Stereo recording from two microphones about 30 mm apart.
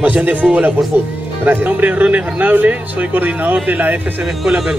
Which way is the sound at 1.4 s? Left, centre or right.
Right.